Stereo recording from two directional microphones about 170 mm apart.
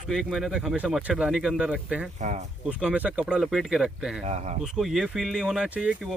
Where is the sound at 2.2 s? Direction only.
45° right (ahead or behind).